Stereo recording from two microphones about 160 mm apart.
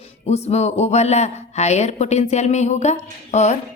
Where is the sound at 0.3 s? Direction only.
40° left (ahead or behind).